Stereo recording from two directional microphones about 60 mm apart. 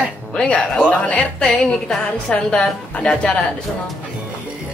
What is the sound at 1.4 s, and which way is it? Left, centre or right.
Speech, centre.